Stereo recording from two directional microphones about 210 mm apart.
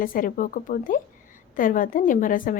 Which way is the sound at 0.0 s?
40° left (ahead or behind).